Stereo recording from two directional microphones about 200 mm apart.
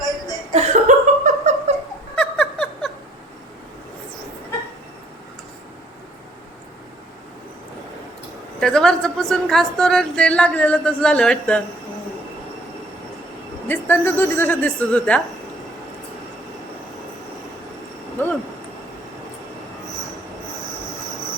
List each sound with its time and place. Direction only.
0.5 s laughter: 35° right (ahead or behind)
2.1 s a sound: 5° left (ahead or behind)
8.6 s a woman's voice: 5° left (ahead or behind)
13.7 s a woman's voice: 10° left (ahead or behind)
18.2 s a woman's voice: 10° left (ahead or behind)